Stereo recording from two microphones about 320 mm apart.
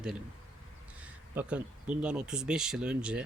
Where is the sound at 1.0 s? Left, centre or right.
Centre.